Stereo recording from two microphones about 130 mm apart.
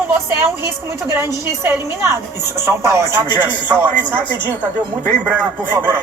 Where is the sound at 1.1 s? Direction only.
20° right (ahead or behind).